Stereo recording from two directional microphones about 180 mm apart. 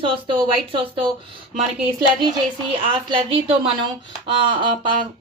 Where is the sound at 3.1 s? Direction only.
30° right (ahead or behind).